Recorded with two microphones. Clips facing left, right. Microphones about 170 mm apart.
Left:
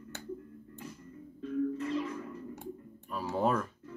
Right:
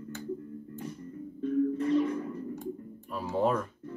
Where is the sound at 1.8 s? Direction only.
30° right (ahead or behind).